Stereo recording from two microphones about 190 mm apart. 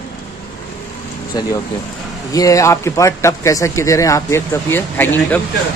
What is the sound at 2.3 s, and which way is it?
Speech, 15° left (ahead or behind).